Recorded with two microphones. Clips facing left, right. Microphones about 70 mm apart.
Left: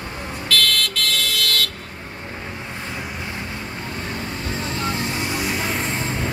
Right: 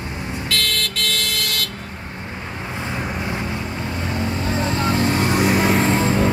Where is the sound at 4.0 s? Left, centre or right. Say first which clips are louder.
Right 6 dB; right.